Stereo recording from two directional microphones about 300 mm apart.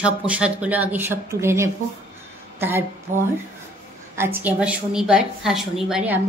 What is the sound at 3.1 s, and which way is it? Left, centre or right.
Speech, right.